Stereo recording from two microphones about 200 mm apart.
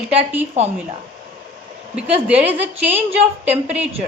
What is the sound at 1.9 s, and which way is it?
A woman's voice, 5° right (ahead or behind).